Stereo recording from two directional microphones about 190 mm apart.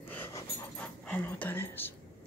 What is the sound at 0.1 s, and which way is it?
Dog, 15° left (ahead or behind).